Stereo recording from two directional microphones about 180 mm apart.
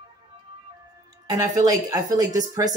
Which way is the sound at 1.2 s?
20° right (ahead or behind).